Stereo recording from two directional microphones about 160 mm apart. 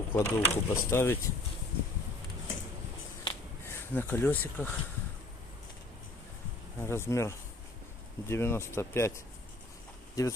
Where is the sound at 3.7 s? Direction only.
15° left (ahead or behind).